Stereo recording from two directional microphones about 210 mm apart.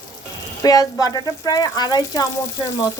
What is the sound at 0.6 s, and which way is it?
Speech, 15° left (ahead or behind).